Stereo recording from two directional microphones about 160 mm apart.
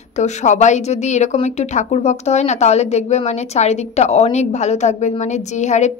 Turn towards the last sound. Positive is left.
turn(degrees=45)  # may be behind; listen again after turning